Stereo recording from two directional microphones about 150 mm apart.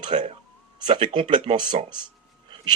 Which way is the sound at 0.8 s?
45° right (ahead or behind).